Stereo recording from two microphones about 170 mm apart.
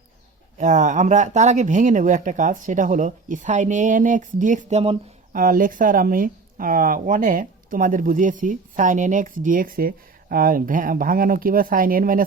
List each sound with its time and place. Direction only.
0.6 s speech: 50° right (ahead or behind)
5.3 s speech: 55° right (ahead or behind)